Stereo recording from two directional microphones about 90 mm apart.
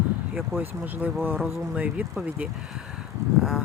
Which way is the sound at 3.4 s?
5° right (ahead or behind).